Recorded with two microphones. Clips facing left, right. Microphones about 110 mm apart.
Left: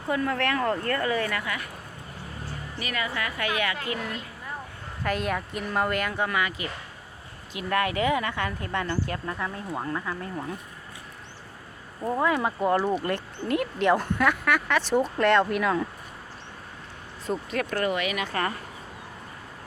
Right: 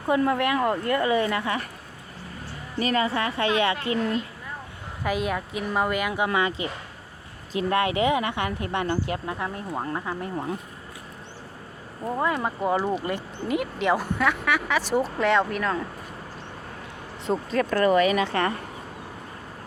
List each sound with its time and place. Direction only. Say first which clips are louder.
0.1 s speech: right 4 dB; 20° right (ahead or behind)
0.4 s speech: right 2 dB; 10° right (ahead or behind); by 1.6 s 25° right (ahead or behind)
2.7 s speech: right 8 dB; 35° right (ahead or behind)
5.0 s speech: right 1 dB; 5° right (ahead or behind)
6.2 s speech: right 3 dB; 25° right (ahead or behind)
12.0 s speech: left 1 dB; centre (ahead or behind)
17.2 s speech: right 4 dB; 30° right (ahead or behind)